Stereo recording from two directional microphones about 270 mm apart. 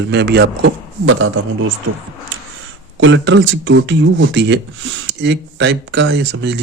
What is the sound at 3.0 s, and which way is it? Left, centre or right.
Speech, right.